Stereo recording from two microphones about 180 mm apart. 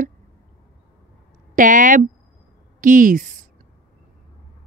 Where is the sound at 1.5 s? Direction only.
45° right (ahead or behind).